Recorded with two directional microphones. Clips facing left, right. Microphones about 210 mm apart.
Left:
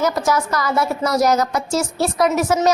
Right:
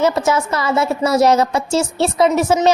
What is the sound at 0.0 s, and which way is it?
A woman's voice, 25° right (ahead or behind).